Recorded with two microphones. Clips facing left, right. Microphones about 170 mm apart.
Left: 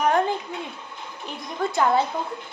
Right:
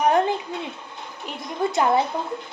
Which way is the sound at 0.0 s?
20° right (ahead or behind).